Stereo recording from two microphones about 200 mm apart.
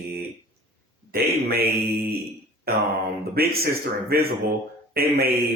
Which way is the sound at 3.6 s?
50° right (ahead or behind).